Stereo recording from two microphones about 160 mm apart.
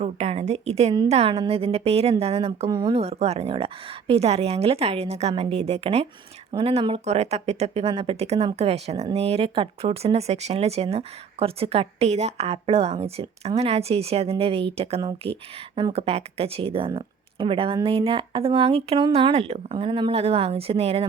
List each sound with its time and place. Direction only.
0.0 s speech: 40° right (ahead or behind)
2.6 s speech: 30° right (ahead or behind)